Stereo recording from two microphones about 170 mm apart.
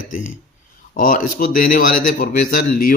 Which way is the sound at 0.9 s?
50° left (ahead or behind).